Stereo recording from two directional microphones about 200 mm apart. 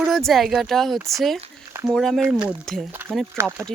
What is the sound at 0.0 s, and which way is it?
Speech, centre (ahead or behind).